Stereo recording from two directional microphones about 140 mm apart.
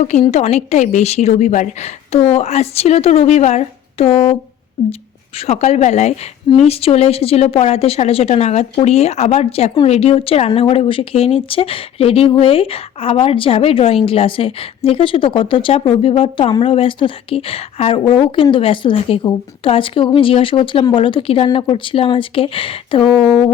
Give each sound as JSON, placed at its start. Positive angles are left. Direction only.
{"t": 0.0, "sound": "a woman's voice", "side_deg": 55}
{"t": 5.5, "sound": "a woman's voice", "side_deg": 50}